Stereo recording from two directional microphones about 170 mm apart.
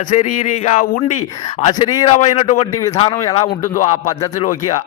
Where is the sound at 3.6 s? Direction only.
50° left (ahead or behind).